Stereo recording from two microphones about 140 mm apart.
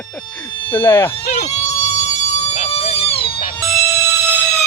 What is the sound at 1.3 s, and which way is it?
Siren, 50° left (ahead or behind).